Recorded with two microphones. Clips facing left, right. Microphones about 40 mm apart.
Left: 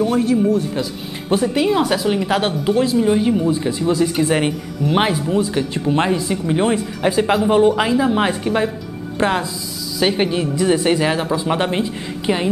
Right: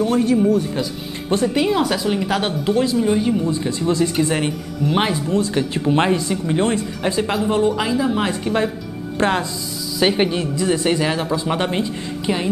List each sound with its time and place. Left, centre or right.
0.0 s speech: centre
5.6 s speech: centre
6.2 s speech: centre
8.5 s speech: centre
10.5 s speech: centre